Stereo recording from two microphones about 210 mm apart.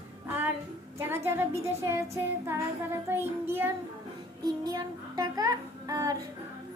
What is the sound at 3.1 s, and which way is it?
Child singing, 10° right (ahead or behind).